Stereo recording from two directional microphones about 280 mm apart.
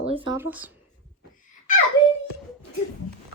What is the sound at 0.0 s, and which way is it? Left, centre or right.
Speech, centre.